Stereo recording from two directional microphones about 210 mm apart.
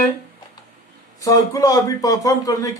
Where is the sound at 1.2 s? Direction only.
15° left (ahead or behind).